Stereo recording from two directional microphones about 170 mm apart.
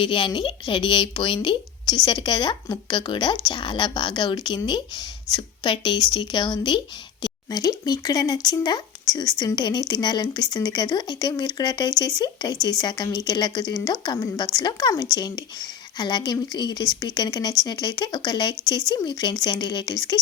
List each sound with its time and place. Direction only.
0.0 s speech: 30° left (ahead or behind)